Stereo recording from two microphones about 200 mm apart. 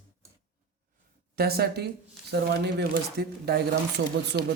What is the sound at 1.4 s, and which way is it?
Speech, 50° right (ahead or behind).